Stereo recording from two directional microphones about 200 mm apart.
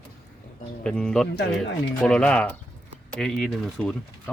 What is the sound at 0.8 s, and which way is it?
Speech, 5° left (ahead or behind).